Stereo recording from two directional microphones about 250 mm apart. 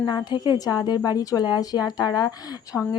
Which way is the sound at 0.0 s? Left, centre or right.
Centre.